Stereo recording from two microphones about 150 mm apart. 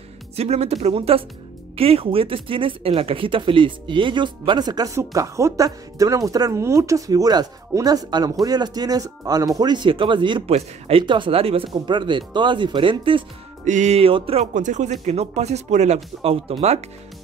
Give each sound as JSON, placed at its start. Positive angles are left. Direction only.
{"t": 0.4, "sound": "speech", "side_deg": -45}
{"t": 13.7, "sound": "speech", "side_deg": -50}
{"t": 14.5, "sound": "speech", "side_deg": -55}